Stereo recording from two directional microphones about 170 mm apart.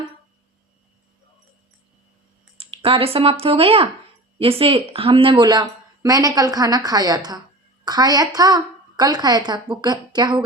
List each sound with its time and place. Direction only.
2.6 s a woman's voice: 35° right (ahead or behind)